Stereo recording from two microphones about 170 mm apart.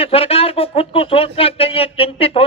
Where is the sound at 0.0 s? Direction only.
35° left (ahead or behind).